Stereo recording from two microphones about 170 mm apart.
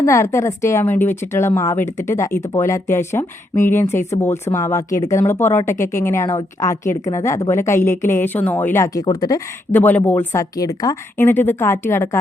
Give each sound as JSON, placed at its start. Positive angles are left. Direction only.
{"t": 0.0, "sound": "a woman's voice", "side_deg": 15}
{"t": 9.7, "sound": "a woman's voice", "side_deg": 10}